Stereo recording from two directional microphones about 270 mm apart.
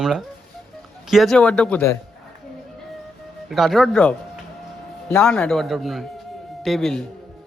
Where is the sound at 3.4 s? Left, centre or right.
Centre.